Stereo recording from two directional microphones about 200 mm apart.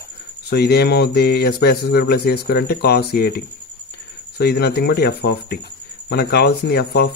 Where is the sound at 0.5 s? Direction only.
55° left (ahead or behind).